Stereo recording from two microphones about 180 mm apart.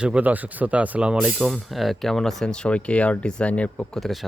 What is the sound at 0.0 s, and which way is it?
Speech, 5° right (ahead or behind).